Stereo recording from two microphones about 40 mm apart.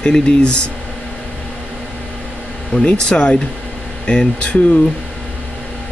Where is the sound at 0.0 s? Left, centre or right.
Left.